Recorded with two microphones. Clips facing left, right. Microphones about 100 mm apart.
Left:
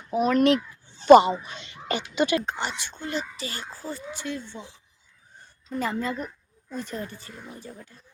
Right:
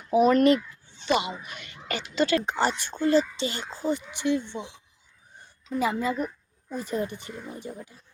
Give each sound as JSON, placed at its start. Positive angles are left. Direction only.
{"t": 0.1, "sound": "speech", "side_deg": 0}
{"t": 0.9, "sound": "speech", "side_deg": 40}
{"t": 2.6, "sound": "speech", "side_deg": -45}
{"t": 5.7, "sound": "speech", "side_deg": -10}